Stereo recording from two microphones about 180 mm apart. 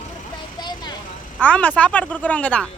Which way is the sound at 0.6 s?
25° left (ahead or behind).